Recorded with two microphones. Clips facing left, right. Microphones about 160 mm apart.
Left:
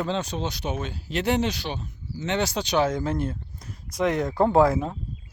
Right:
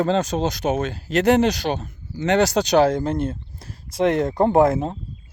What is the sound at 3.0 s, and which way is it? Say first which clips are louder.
Speech: right 4 dB; 20° right (ahead or behind).